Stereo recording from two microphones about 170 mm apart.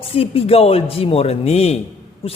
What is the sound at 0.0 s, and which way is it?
Speech, 35° left (ahead or behind).